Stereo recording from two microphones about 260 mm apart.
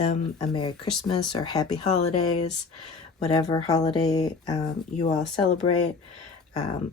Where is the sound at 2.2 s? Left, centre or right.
Left.